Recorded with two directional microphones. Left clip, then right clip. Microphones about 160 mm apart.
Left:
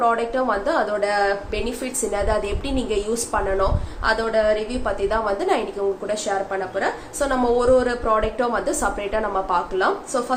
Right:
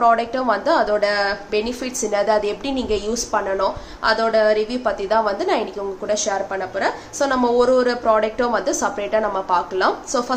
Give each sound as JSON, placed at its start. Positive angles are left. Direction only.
{"t": 0.0, "sound": "a woman's voice", "side_deg": -30}